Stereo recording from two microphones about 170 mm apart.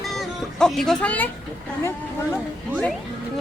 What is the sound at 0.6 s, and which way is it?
Speech, 5° left (ahead or behind).